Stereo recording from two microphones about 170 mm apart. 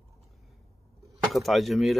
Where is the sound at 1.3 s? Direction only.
Centre (ahead or behind).